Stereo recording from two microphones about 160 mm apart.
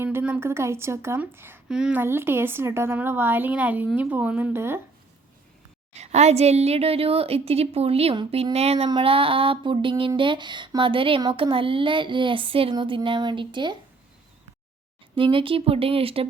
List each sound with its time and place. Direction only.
0.0 s a woman's voice: 10° right (ahead or behind)
5.9 s speech: 45° right (ahead or behind)
15.1 s speech: 35° right (ahead or behind)